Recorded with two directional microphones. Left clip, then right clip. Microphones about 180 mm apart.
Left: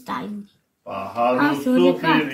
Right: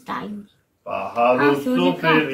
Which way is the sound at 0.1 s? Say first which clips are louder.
Even; 35° left (ahead or behind).